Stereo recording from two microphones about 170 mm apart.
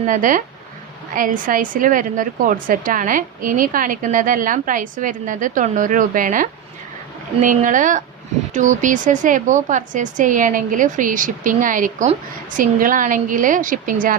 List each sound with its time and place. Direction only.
0.0 s a woman's voice: 50° right (ahead or behind)